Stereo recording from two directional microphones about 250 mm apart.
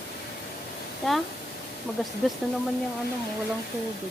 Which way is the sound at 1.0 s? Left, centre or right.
Centre.